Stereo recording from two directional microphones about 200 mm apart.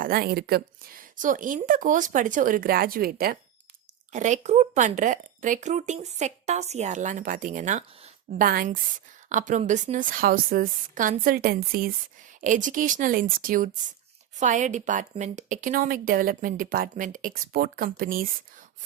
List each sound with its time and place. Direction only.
0.0 s speech: 50° right (ahead or behind)
4.1 s speech: 35° right (ahead or behind)